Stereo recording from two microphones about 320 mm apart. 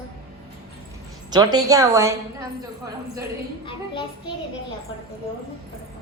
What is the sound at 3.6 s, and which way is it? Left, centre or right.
Speech, centre.